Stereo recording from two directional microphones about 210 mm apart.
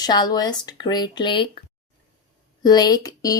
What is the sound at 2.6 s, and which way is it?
Speech, 20° left (ahead or behind).